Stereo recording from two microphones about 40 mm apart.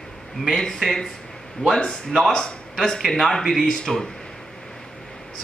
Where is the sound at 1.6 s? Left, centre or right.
Centre.